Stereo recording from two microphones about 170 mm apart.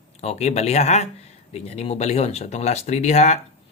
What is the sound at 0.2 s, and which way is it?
Speech, 40° left (ahead or behind).